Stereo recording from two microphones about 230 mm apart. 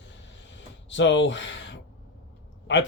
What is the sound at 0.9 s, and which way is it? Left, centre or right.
Speech, left.